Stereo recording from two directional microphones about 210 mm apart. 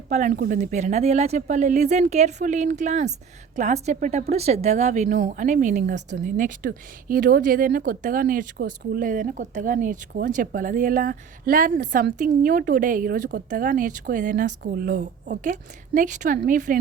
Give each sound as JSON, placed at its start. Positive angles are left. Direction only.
{"t": 0.1, "sound": "speech", "side_deg": -40}